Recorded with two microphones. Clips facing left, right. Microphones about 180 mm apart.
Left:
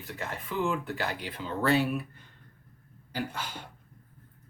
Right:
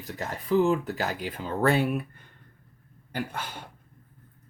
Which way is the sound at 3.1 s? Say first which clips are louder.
Right 2 dB; 55° right (ahead or behind).